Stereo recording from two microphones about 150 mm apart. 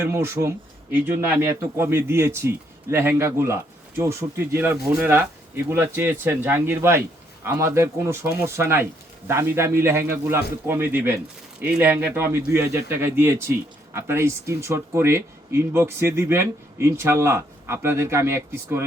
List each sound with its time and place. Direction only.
0.0 s speech: 15° right (ahead or behind)